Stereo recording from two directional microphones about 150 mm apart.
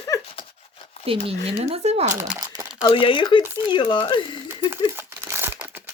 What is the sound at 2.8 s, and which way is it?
Speech, 35° left (ahead or behind).